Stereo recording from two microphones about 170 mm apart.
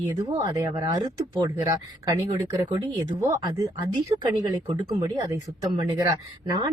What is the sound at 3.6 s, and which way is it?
Speech, 25° right (ahead or behind).